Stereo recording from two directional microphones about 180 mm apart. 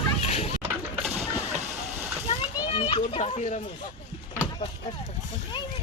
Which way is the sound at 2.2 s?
30° left (ahead or behind).